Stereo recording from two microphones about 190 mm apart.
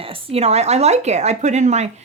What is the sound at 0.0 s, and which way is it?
A woman's voice, 30° right (ahead or behind).